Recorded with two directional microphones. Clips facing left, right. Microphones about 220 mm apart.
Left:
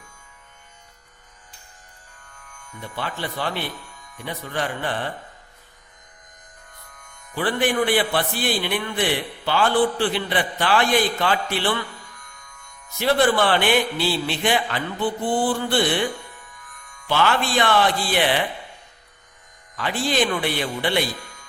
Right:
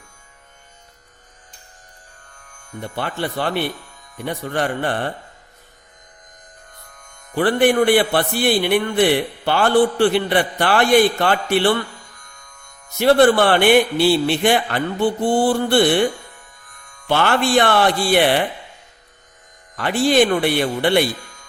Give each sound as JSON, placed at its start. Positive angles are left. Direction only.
{"t": 2.5, "sound": "a man's voice", "side_deg": -45}
{"t": 7.1, "sound": "a man's voice", "side_deg": -60}
{"t": 13.0, "sound": "a man's voice", "side_deg": -60}
{"t": 15.4, "sound": "mantra", "side_deg": -60}
{"t": 17.1, "sound": "a man's voice", "side_deg": -60}
{"t": 19.7, "sound": "a man's voice", "side_deg": -65}